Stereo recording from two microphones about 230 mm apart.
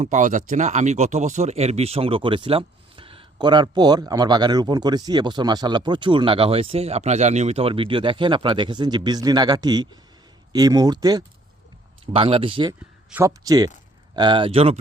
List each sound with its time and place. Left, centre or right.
0.0 s speech: right
13.1 s speech: centre